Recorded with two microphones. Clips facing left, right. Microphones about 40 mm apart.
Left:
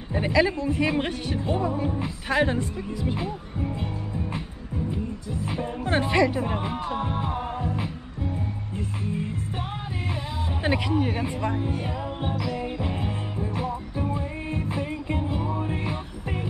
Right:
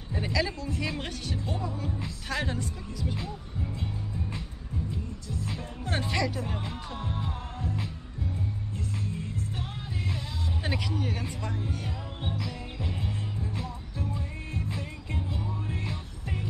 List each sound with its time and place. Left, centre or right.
0.1 s speech: left
8.7 s music: left
10.6 s music: left